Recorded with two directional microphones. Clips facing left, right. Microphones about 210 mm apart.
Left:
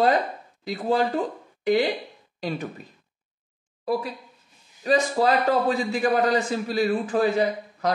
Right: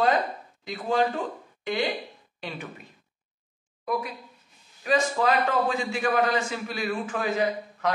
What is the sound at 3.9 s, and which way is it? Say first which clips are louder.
A man's voice: left 3 dB; 30° left (ahead or behind).